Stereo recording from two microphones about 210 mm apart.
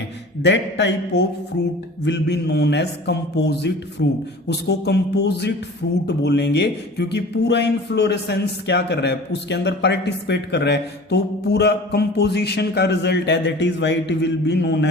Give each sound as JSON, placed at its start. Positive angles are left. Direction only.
{"t": 0.4, "sound": "a man's voice", "side_deg": 55}